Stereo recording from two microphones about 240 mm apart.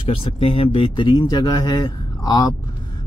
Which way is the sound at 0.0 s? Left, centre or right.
Left.